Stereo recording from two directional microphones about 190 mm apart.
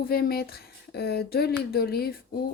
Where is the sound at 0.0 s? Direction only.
50° left (ahead or behind).